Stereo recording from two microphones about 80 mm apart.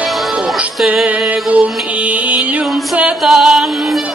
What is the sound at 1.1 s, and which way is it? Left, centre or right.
Mantra, centre.